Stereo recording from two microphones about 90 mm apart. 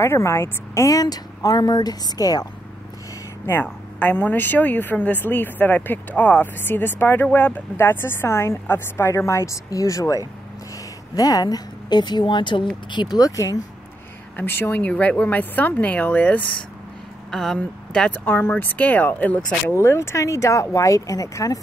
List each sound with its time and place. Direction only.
0.0 s speech: 30° left (ahead or behind)
3.6 s a woman's voice: 20° left (ahead or behind); by 13.2 s 60° left (ahead or behind)
13.2 s a woman's voice: 40° left (ahead or behind)
14.3 s speech: 25° left (ahead or behind)
17.3 s speech: 5° left (ahead or behind)
19.7 s a woman's voice: 30° left (ahead or behind)